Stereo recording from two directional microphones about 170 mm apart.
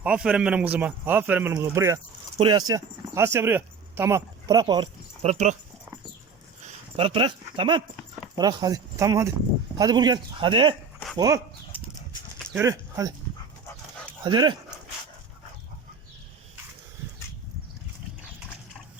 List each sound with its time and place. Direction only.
0.0 s speech: 5° right (ahead or behind); by 4.9 s 25° right (ahead or behind)
5.2 s speech: 40° right (ahead or behind)
6.9 s speech: 30° right (ahead or behind)
12.5 s speech: 20° right (ahead or behind)
14.3 s speech: 25° right (ahead or behind)